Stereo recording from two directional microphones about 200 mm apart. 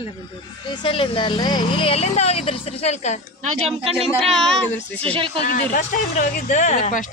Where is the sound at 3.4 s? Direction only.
35° right (ahead or behind).